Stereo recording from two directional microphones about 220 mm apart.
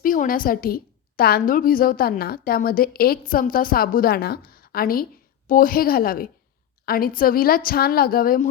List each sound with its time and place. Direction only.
0.0 s a woman's voice: 40° left (ahead or behind)